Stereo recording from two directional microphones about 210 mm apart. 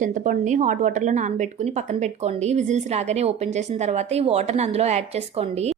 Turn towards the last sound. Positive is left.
turn(degrees=-30)  # may be behind; listen again after turning